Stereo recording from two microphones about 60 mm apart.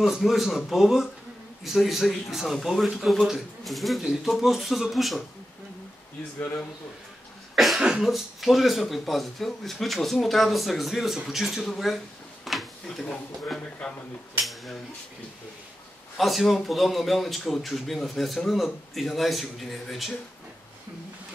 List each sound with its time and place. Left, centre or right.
0.0 s speech: centre
7.5 s cough: centre
7.8 s speech: centre
12.4 s a sound: centre
13.8 s speech: centre
14.4 s speech: centre
16.2 s speech: centre